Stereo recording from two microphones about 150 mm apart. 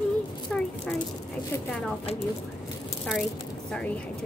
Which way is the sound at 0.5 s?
5° left (ahead or behind).